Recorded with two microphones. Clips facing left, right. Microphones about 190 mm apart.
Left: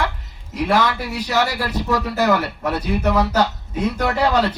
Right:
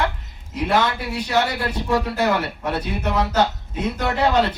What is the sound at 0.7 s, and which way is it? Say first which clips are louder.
A man's voice: left 1 dB; 25° right (ahead or behind).